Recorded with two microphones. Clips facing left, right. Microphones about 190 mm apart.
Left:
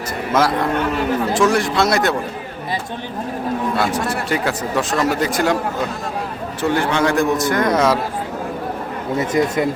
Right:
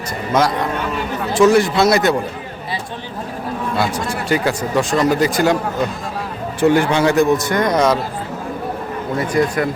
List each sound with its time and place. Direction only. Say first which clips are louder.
0.3 s speech: even; 5° left (ahead or behind)
3.8 s speech: even; centre (ahead or behind)
6.6 s speech: right 4 dB; 10° right (ahead or behind); by 7.9 s 5° left (ahead or behind)
9.1 s speech: even; 20° left (ahead or behind)